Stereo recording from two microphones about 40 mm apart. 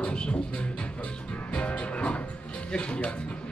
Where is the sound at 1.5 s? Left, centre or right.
Left.